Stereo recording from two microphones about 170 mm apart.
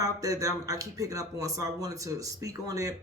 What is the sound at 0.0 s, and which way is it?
Speech, 20° right (ahead or behind).